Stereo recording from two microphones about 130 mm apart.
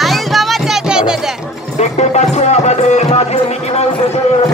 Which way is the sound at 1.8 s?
60° left (ahead or behind).